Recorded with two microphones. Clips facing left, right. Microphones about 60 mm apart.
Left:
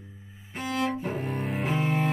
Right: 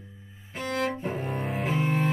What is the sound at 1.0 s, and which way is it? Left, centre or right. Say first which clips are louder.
Cello: even; centre.